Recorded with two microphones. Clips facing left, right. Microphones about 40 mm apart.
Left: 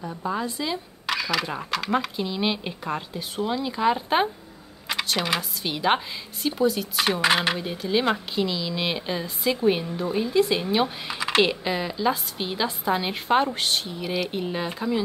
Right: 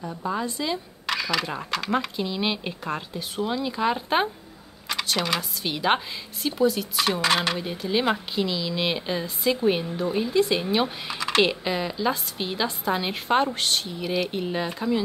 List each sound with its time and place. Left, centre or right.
0.0 s speech: centre
7.1 s speech: centre
7.5 s speech: centre
11.1 s typing: centre
11.4 s speech: centre